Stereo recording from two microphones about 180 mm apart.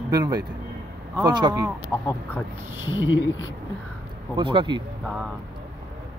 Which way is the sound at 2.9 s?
90° left.